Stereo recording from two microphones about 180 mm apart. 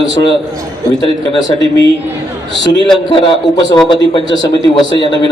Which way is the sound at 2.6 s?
20° left (ahead or behind).